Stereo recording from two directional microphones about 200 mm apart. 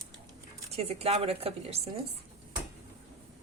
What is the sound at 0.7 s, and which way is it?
A woman's voice, 30° right (ahead or behind).